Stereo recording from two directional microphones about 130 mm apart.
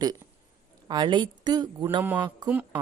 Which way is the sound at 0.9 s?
35° right (ahead or behind).